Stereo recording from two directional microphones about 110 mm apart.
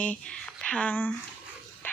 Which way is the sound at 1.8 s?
15° left (ahead or behind).